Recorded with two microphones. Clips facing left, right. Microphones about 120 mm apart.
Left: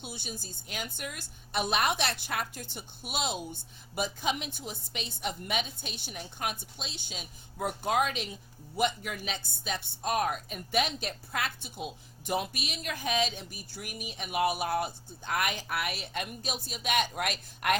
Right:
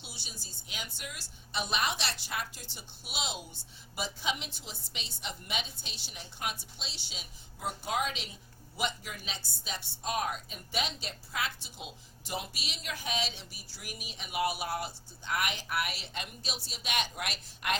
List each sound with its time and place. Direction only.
0.0 s speech: 50° left (ahead or behind)